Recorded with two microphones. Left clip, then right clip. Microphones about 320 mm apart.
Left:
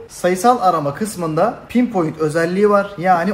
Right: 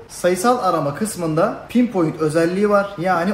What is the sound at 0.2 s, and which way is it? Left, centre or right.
Speech, left.